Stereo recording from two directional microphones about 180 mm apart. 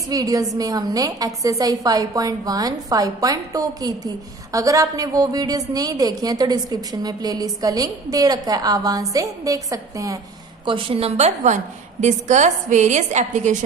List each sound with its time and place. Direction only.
0.1 s a woman's voice: 20° right (ahead or behind); by 13.6 s 40° right (ahead or behind)